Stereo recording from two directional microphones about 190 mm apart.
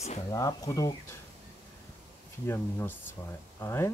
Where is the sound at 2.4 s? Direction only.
10° left (ahead or behind).